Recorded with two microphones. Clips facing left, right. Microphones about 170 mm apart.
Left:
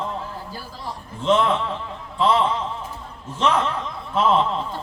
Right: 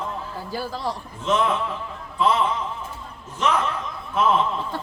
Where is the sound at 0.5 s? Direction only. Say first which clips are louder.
Right 6 dB; 80° right.